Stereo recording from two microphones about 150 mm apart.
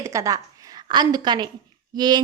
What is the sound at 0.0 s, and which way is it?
A woman's voice, 20° right (ahead or behind).